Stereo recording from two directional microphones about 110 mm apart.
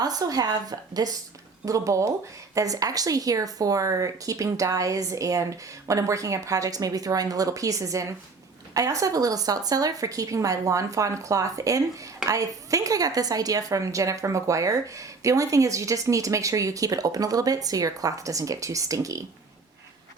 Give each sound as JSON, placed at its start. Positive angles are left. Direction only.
{"t": 0.0, "sound": "a woman's voice", "side_deg": -35}